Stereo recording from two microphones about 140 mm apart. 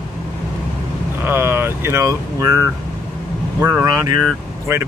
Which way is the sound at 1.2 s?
15° right (ahead or behind).